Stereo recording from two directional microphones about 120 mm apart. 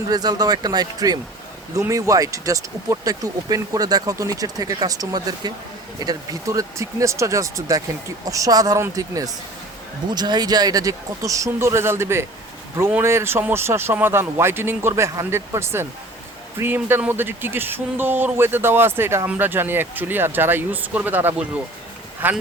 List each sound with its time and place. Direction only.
0.1 s speech: 35° right (ahead or behind); by 22.4 s 15° right (ahead or behind)